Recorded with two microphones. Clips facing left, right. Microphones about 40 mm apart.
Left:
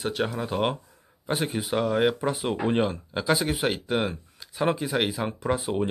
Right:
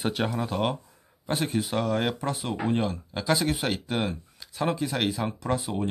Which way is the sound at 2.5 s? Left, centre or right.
Left.